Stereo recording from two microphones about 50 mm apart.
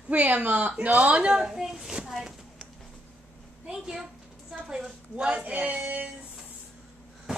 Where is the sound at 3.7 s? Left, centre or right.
Centre.